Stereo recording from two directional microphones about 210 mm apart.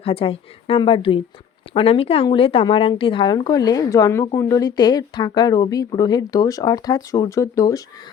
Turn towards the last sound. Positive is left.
turn(degrees=15)  # may be behind; listen again after turning